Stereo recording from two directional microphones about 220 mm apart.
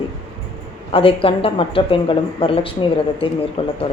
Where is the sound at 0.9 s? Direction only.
25° left (ahead or behind).